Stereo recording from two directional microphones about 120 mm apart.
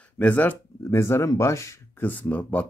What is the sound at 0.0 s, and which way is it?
Speech, 10° left (ahead or behind).